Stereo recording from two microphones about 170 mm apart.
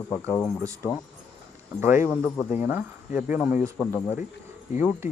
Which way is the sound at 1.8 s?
10° right (ahead or behind).